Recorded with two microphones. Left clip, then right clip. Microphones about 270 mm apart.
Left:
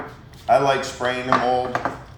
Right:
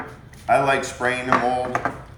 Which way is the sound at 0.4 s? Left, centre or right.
Centre.